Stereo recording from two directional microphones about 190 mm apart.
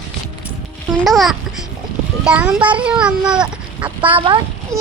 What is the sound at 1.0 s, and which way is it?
A child's voice, centre (ahead or behind).